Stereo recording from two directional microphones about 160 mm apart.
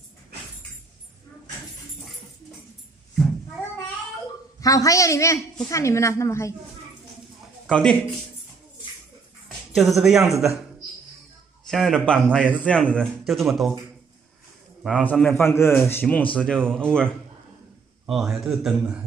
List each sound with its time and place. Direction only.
4.6 s a woman's voice: 20° left (ahead or behind)
7.6 s a man's voice: 5° left (ahead or behind)
9.8 s a man's voice: centre (ahead or behind)
11.7 s a man's voice: centre (ahead or behind)
14.8 s a man's voice: 5° right (ahead or behind)
15.3 s a man's voice: 15° left (ahead or behind); by 19.0 s 5° right (ahead or behind)